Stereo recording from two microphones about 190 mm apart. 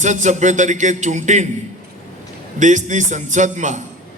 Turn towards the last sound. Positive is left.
turn(degrees=-40)  # may be behind; listen again after turning